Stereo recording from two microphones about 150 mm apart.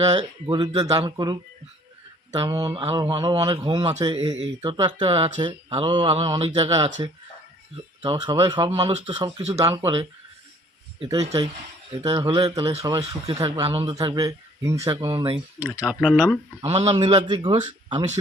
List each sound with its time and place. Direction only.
0.1 s speech: 30° right (ahead or behind)
8.0 s speech: 30° right (ahead or behind)
11.1 s speech: 25° right (ahead or behind)
15.5 s speech: 10° right (ahead or behind)
16.6 s speech: 45° right (ahead or behind)
16.8 s speech: 30° right (ahead or behind)